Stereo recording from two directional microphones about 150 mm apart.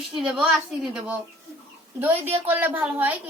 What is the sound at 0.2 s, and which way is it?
A woman's voice, 5° right (ahead or behind).